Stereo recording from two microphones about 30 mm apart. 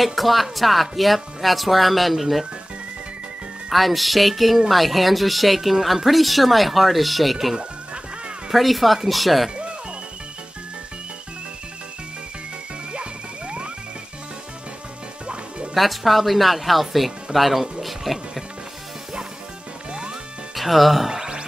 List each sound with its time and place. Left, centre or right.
0.0 s speech: centre
3.7 s speech: centre
7.3 s speech: centre
8.5 s speech: centre
12.9 s music: right
15.7 s speech: centre
19.9 s music: right
20.5 s speech: centre